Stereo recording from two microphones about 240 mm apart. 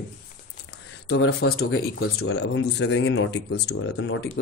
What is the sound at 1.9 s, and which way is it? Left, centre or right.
Speech, left.